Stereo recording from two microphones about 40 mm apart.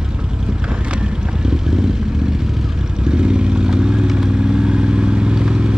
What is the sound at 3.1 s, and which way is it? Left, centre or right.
Vehicle, right.